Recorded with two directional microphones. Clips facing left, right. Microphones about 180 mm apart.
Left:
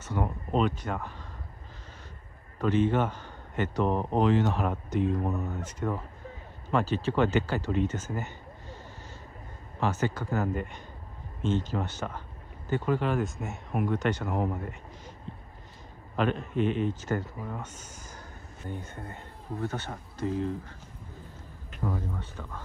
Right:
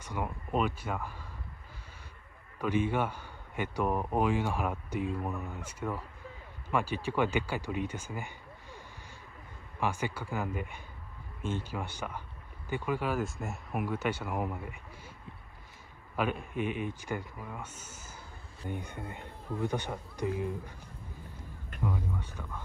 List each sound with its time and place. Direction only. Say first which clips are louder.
0.2 s a sound: left 4 dB; 10° right (ahead or behind)
0.6 s speech: left 4 dB; 5° right (ahead or behind)
2.6 s a man's voice: left 4 dB; 10° right (ahead or behind)
3.9 s speech: left 3 dB; 25° left (ahead or behind)
4.2 s speech: left 6 dB; 10° right (ahead or behind)
9.8 s speech: left 4 dB; 10° right (ahead or behind)
14.6 s a sound: left 4 dB; 10° right (ahead or behind)
16.2 s speech: left 5 dB; 10° right (ahead or behind)